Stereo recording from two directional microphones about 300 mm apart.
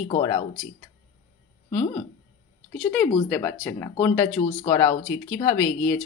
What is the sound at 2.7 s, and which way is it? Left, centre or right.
Speech, centre.